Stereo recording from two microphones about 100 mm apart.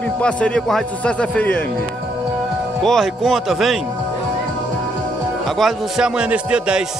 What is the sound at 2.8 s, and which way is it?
A man's voice, 5° left (ahead or behind).